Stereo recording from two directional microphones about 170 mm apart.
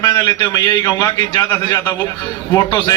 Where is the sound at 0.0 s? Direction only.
25° left (ahead or behind).